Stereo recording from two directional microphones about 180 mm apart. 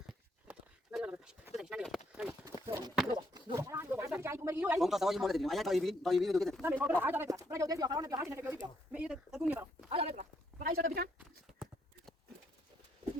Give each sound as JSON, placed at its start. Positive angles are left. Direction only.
{"t": 0.4, "sound": "a sound", "side_deg": -5}
{"t": 2.6, "sound": "clip-clop", "side_deg": -20}
{"t": 3.2, "sound": "a sound", "side_deg": -20}
{"t": 4.8, "sound": "a man's voice", "side_deg": 0}
{"t": 6.6, "sound": "speech", "side_deg": -10}
{"t": 9.9, "sound": "speech", "side_deg": -30}
{"t": 10.2, "sound": "speech", "side_deg": -55}